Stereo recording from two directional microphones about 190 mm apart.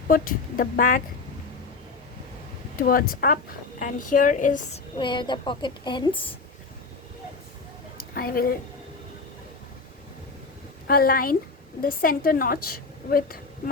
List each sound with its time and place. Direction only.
0.1 s a woman's voice: 45° left (ahead or behind)
2.7 s a woman's voice: 50° left (ahead or behind)
4.9 s a woman's voice: 25° left (ahead or behind)
7.9 s a sound: 50° left (ahead or behind)
10.8 s a woman's voice: 50° left (ahead or behind)